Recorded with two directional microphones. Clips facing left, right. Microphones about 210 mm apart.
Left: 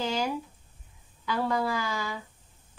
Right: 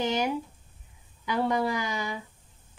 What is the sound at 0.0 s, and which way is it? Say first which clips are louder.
Speech: right 2 dB; 20° right (ahead or behind).